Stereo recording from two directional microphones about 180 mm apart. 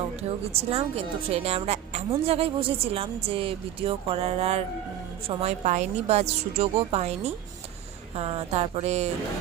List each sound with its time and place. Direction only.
0.7 s speech: 35° right (ahead or behind)